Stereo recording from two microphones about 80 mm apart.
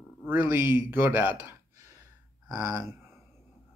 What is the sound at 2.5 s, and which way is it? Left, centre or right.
Speech, right.